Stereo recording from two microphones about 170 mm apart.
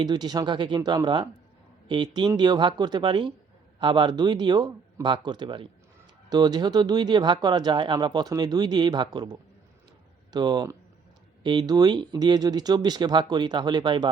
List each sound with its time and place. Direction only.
0.0 s speech: 25° right (ahead or behind)
10.3 s speech: 25° right (ahead or behind)